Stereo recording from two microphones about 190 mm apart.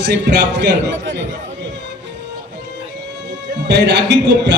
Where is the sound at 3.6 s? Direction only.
65° right (ahead or behind).